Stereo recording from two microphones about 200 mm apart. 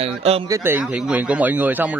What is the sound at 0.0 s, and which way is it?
Speech, 30° right (ahead or behind).